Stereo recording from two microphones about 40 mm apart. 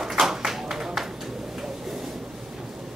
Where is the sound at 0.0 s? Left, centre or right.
Centre.